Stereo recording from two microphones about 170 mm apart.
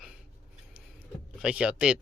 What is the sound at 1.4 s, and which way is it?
Speech, 5° right (ahead or behind).